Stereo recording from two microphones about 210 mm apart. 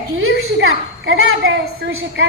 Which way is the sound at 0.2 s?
65° right (ahead or behind).